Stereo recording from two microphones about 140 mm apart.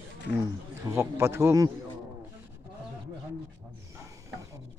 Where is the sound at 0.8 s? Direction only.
20° right (ahead or behind).